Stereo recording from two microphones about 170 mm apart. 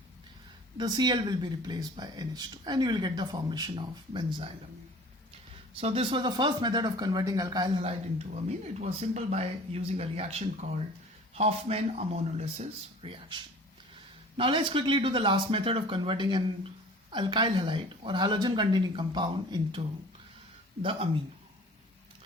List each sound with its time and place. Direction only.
0.8 s speech: 25° right (ahead or behind)
5.7 s speech: 35° right (ahead or behind)
8.8 s speech: 40° right (ahead or behind)